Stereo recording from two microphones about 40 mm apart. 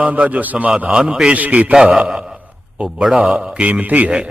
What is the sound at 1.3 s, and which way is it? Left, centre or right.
Speech, right.